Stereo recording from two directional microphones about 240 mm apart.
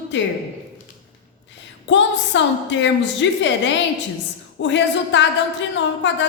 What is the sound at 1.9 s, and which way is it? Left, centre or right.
Speech, left.